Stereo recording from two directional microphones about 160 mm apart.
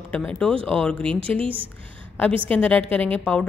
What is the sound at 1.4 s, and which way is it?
Speech, 35° right (ahead or behind).